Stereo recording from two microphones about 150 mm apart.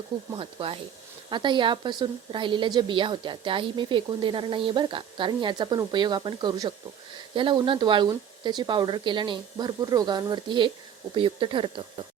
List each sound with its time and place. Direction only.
0.3 s a woman's voice: 35° right (ahead or behind)